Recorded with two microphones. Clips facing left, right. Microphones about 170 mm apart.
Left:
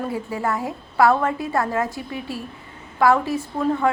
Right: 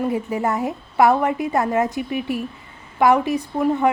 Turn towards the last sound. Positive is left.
turn(degrees=-15)  # may be behind; listen again after turning